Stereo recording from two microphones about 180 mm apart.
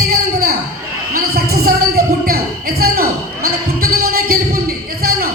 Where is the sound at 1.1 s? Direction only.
55° right (ahead or behind).